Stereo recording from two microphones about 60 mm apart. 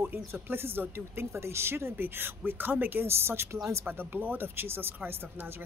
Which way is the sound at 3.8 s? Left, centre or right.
Right.